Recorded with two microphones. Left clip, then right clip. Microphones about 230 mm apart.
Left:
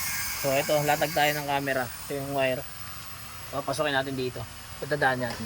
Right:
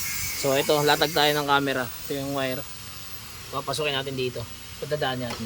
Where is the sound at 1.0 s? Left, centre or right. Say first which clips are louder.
Right 3 dB; right.